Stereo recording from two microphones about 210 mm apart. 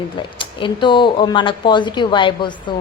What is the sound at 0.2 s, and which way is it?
A woman's voice, 20° left (ahead or behind).